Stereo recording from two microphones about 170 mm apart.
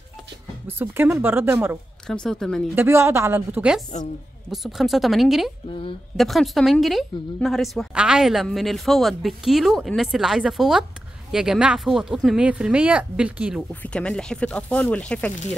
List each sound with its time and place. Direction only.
0.7 s speech: 10° right (ahead or behind)
2.0 s a woman's voice: 5° left (ahead or behind)
2.7 s a woman's voice: 15° right (ahead or behind)
5.7 s speech: 30° left (ahead or behind)
6.1 s a woman's voice: centre (ahead or behind)
13.6 s speech: 5° left (ahead or behind)